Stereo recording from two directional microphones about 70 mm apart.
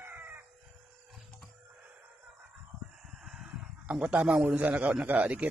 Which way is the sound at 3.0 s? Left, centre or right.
Centre.